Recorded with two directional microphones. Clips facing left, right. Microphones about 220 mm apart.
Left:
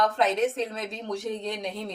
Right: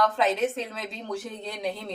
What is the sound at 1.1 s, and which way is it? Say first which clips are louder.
Speech: left 4 dB; 5° right (ahead or behind).